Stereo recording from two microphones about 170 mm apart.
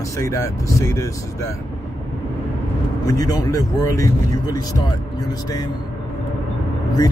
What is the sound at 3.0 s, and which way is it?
Speech, 20° left (ahead or behind).